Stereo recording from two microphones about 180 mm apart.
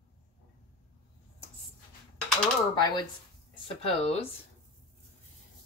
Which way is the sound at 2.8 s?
25° left (ahead or behind).